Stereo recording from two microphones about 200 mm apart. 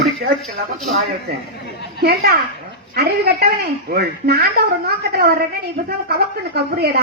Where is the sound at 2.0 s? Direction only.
50° right (ahead or behind).